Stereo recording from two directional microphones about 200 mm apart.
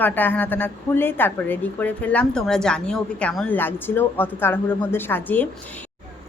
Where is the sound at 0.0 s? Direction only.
10° left (ahead or behind).